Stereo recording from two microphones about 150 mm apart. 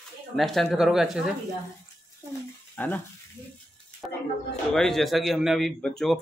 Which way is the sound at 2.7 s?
10° left (ahead or behind).